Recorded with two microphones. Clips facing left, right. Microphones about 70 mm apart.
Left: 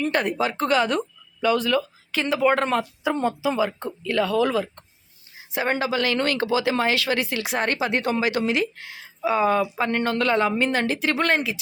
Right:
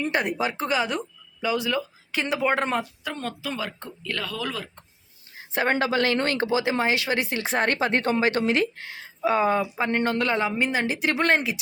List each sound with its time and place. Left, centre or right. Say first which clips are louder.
0.0 s speech: left 2 dB; centre
2.1 s speech: left 3 dB; right
3.0 s speech: left 9 dB; centre
5.5 s a woman's voice: right 1 dB; right